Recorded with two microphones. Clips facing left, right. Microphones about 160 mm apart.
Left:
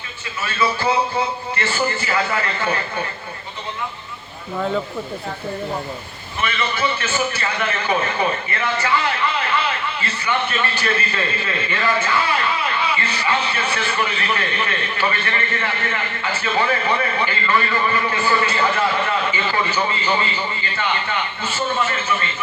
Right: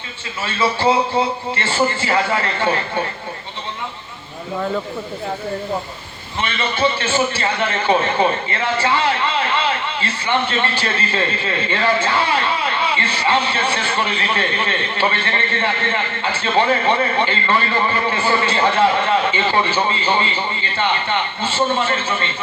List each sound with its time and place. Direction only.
0.4 s a man's voice: 30° right (ahead or behind)
6.4 s a man's voice: 30° right (ahead or behind)